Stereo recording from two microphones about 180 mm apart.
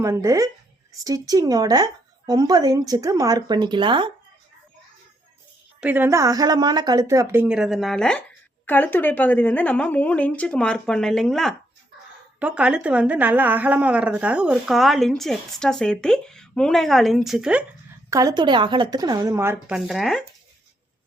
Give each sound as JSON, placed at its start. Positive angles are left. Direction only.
{"t": 0.0, "sound": "a woman's voice", "side_deg": -20}
{"t": 5.8, "sound": "a woman's voice", "side_deg": -10}
{"t": 18.1, "sound": "a woman's voice", "side_deg": -20}
{"t": 19.7, "sound": "a woman's voice", "side_deg": 0}